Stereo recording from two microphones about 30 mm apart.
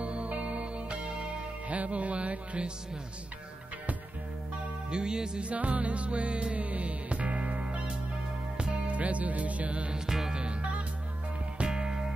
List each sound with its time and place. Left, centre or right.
0.0 s music: right
1.7 s music: right
4.9 s music: right
5.4 s music: right
8.9 s music: right
9.9 s music: centre
10.3 s music: right
11.6 s music: right